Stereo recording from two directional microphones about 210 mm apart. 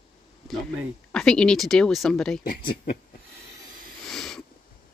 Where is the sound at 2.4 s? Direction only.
45° left (ahead or behind).